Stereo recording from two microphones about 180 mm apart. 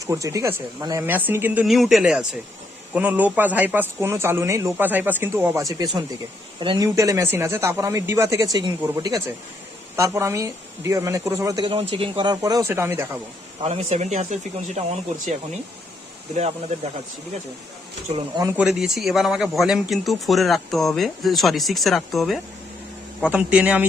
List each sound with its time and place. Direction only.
0.0 s speech: 15° right (ahead or behind)
13.6 s speech: 35° right (ahead or behind)
16.3 s speech: 40° right (ahead or behind)
18.5 s speech: 5° right (ahead or behind)